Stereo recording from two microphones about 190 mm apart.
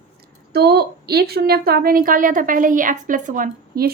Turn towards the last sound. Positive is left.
turn(degrees=-45)  # may be behind; listen again after turning